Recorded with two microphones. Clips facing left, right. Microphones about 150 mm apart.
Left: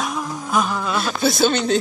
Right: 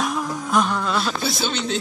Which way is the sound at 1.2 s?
45° left (ahead or behind).